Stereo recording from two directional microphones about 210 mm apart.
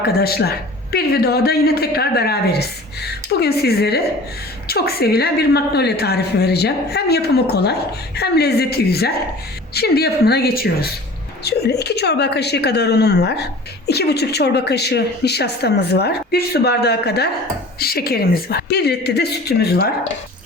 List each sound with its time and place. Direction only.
0.0 s a woman's voice: 50° left (ahead or behind)